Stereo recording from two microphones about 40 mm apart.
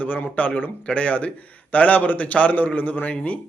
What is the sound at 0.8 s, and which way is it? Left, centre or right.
A man's voice, left.